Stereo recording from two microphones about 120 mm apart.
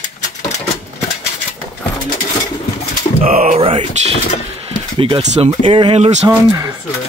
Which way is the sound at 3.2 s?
90° right.